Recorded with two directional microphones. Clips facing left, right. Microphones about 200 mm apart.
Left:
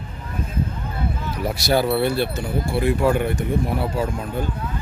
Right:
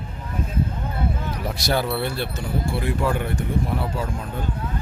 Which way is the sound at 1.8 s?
20° left (ahead or behind).